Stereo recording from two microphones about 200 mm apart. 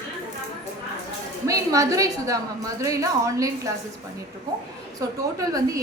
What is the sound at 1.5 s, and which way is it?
A woman's voice, 15° right (ahead or behind).